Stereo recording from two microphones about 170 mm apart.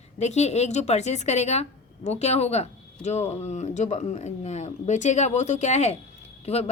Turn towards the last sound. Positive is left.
turn(degrees=35)  # may be behind; listen again after turning